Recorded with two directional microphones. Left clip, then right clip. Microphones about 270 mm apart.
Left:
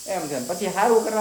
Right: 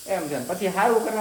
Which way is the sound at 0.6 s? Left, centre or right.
Centre.